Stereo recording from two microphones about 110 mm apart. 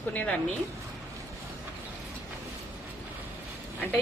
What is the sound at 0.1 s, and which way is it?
Speech, 15° left (ahead or behind).